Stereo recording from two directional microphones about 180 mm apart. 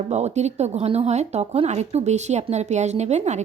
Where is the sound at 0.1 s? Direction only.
40° right (ahead or behind).